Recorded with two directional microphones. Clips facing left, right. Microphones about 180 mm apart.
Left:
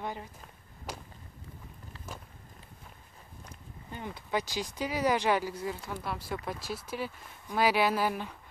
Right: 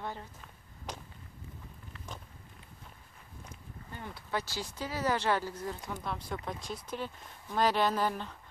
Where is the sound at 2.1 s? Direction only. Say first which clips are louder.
Left 2 dB; 5° left (ahead or behind).